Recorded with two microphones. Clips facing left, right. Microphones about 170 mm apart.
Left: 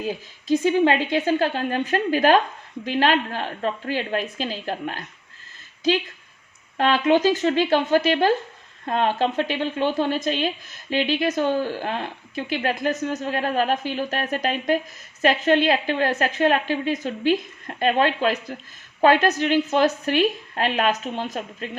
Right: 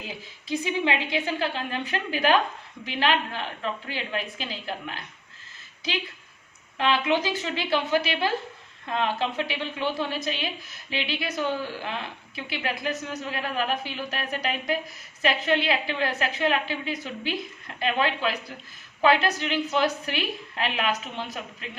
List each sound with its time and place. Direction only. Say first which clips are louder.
0.0 s a woman's voice: left 10 dB; 45° left (ahead or behind)
6.7 s a woman's voice: left 5 dB; 50° left (ahead or behind)